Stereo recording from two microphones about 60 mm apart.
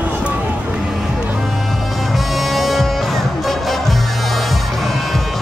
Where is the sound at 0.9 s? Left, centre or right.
Centre.